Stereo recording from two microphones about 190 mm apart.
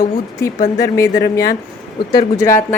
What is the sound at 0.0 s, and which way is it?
Speech, 15° left (ahead or behind).